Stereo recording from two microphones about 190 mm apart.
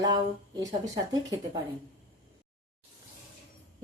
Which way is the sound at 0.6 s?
20° right (ahead or behind).